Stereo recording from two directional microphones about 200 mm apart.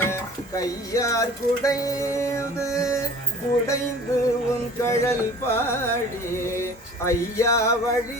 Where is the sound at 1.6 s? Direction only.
15° left (ahead or behind).